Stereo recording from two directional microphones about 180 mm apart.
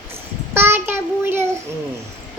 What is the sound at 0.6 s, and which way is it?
Child singing, 10° right (ahead or behind).